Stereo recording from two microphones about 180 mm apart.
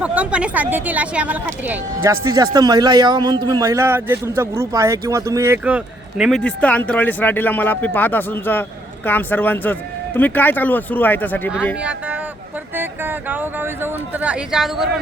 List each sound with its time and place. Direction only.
0.0 s a man's voice: 10° right (ahead or behind)
6.4 s speech: 10° left (ahead or behind)
11.8 s a man's voice: 10° right (ahead or behind)